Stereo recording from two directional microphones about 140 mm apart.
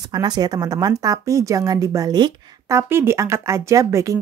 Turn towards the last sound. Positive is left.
turn(degrees=-25)  # may be behind; listen again after turning